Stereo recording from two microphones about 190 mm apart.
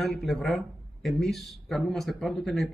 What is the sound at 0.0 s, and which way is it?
Speech, centre (ahead or behind).